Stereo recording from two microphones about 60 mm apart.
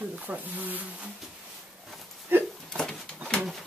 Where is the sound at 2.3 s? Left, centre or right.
Right.